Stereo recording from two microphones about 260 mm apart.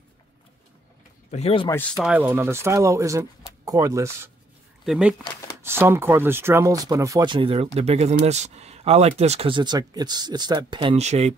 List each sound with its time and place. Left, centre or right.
1.3 s speech: left
1.8 s speech: centre; by 11.3 s right